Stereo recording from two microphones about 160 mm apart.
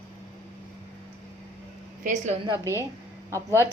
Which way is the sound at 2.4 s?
20° right (ahead or behind).